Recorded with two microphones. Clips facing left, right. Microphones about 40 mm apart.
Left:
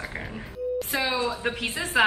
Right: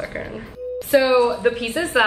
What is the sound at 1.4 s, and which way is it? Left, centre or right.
Speech, centre.